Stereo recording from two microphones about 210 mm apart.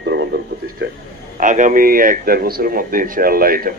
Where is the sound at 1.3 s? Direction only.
40° right (ahead or behind).